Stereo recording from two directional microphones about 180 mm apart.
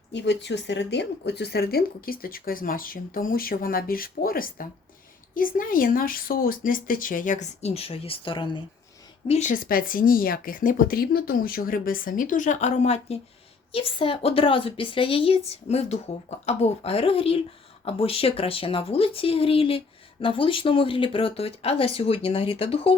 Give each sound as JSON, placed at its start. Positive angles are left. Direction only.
{"t": 0.1, "sound": "speech", "side_deg": 75}
{"t": 9.2, "sound": "speech", "side_deg": 40}